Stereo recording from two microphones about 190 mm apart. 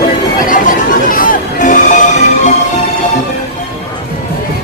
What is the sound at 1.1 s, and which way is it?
Music, 45° left (ahead or behind).